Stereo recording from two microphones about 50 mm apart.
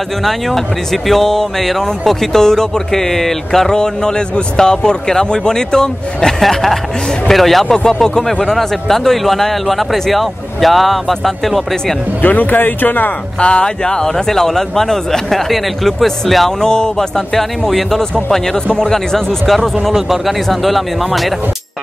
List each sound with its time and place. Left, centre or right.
0.2 s speech: centre
7.6 s speech: centre
12.2 s speech: left
13.4 s speech: centre
16.6 s speech: centre
17.4 s speech: centre